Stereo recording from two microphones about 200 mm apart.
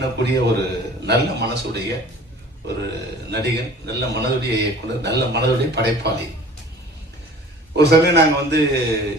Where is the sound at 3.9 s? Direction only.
55° right (ahead or behind).